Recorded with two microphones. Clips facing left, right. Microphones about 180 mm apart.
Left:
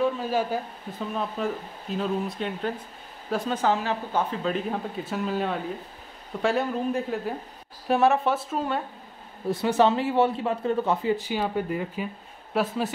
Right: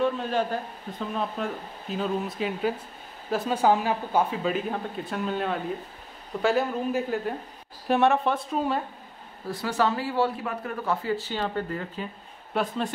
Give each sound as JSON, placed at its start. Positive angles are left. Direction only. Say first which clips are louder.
{"t": 0.0, "sound": "speech", "louder": "even", "side_deg": 5}
{"t": 9.5, "sound": "speech", "louder": "left 5 dB", "side_deg": 25}